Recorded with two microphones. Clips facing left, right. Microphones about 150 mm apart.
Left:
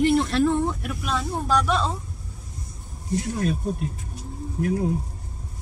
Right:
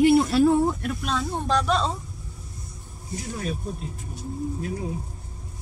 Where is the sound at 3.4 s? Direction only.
60° left (ahead or behind).